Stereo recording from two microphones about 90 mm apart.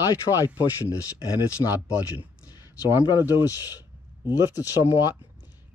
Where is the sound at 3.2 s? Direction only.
25° right (ahead or behind).